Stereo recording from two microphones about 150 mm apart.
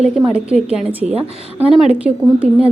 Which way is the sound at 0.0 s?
5° right (ahead or behind).